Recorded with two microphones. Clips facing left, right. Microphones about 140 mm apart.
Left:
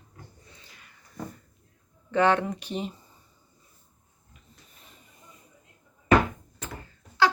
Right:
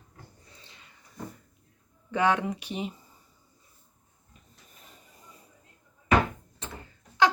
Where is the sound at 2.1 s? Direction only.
10° right (ahead or behind).